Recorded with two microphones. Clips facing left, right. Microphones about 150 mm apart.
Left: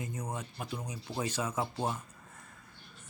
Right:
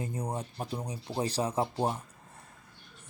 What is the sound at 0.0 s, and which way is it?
Speech, 35° right (ahead or behind).